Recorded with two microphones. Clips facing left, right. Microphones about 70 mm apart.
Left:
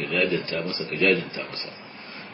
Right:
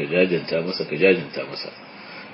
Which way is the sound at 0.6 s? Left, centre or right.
Right.